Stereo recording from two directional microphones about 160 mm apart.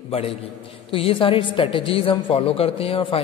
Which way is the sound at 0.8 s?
35° left (ahead or behind).